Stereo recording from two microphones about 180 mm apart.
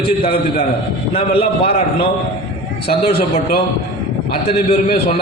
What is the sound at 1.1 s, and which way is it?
Speech, 35° left (ahead or behind).